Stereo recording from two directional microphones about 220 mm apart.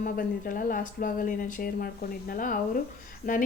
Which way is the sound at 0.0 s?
40° left (ahead or behind).